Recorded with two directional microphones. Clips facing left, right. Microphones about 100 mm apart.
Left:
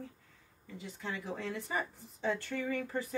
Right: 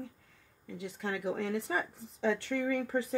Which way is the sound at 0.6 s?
65° right (ahead or behind).